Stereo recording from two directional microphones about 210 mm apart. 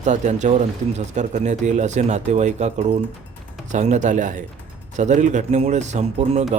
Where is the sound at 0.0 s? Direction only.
35° right (ahead or behind).